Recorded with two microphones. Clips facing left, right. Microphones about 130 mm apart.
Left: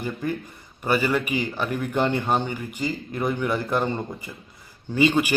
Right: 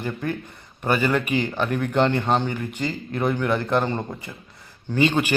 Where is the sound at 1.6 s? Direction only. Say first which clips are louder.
Right 3 dB; 50° right (ahead or behind).